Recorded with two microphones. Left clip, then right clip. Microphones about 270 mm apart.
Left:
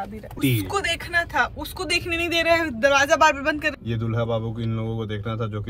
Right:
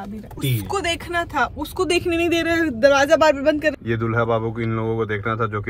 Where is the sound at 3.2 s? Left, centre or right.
Left.